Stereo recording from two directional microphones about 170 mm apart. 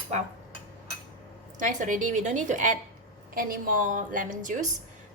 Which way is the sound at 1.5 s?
50° right (ahead or behind).